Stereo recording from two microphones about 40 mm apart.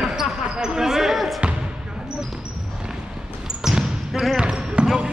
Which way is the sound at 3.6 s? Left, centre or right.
Centre.